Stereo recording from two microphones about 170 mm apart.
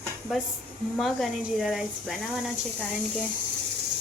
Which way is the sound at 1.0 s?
Centre (ahead or behind).